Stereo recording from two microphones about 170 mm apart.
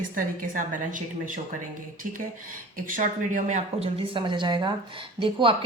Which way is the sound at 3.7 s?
35° right (ahead or behind).